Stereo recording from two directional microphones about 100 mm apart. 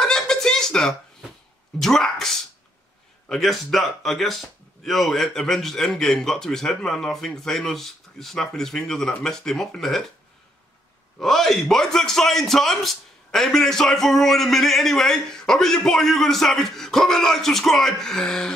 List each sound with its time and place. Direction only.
0.0 s a sound: 5° left (ahead or behind)
1.8 s a man's voice: 5° left (ahead or behind)
11.1 s a man's voice: 5° left (ahead or behind)